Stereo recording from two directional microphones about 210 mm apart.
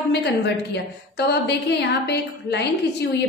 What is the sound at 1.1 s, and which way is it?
A woman's voice, 55° left (ahead or behind).